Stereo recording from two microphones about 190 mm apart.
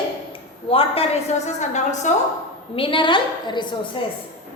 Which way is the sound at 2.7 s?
25° left (ahead or behind).